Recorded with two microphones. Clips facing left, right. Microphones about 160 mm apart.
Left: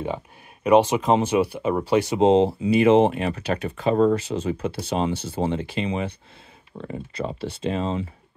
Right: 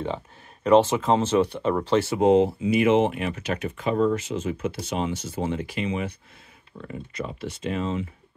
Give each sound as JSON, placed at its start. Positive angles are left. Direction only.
{"t": 0.7, "sound": "speech", "side_deg": 15}